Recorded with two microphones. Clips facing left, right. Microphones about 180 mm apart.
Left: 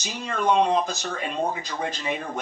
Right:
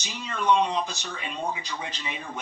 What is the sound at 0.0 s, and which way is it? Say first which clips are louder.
Speech: left 3 dB; 45° left (ahead or behind).